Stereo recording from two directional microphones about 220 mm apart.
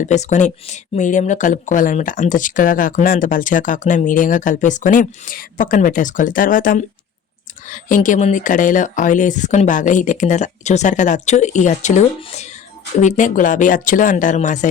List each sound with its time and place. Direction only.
0.0 s speech: 30° left (ahead or behind)